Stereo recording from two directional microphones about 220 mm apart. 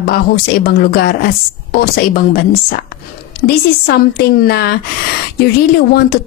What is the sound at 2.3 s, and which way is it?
Speech, 40° left (ahead or behind).